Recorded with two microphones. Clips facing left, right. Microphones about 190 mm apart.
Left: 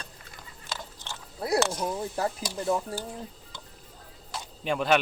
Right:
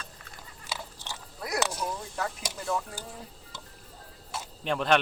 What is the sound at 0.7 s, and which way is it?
Biting, 10° right (ahead or behind).